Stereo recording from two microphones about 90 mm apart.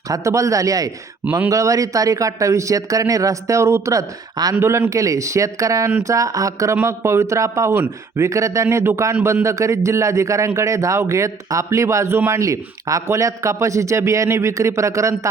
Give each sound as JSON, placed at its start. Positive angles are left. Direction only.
{"t": 0.1, "sound": "a man's voice", "side_deg": -35}